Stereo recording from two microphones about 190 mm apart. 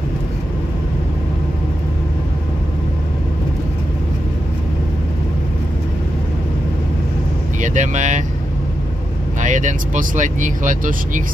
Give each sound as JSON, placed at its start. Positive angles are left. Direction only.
{"t": 7.6, "sound": "speech", "side_deg": -40}
{"t": 9.4, "sound": "speech", "side_deg": -40}